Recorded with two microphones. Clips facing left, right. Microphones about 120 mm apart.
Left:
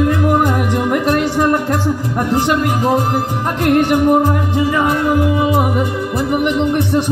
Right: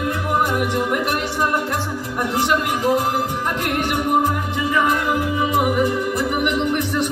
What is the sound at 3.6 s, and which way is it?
Music, 40° left (ahead or behind).